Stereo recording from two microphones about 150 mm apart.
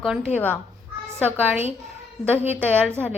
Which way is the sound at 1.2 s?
10° right (ahead or behind).